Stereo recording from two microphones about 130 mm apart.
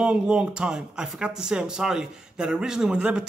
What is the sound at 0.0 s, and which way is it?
Speech, 5° right (ahead or behind).